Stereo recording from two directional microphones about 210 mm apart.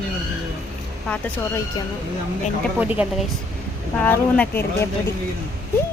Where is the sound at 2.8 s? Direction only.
5° right (ahead or behind).